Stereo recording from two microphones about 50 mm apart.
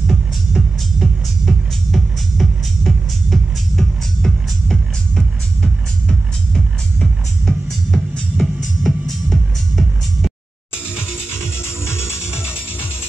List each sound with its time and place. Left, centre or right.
0.0 s music: centre
11.6 s music: left